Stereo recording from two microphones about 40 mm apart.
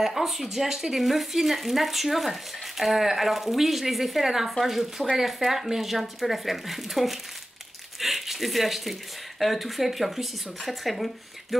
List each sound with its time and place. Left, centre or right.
0.0 s speech: centre
8.0 s a sound: centre
9.4 s speech: centre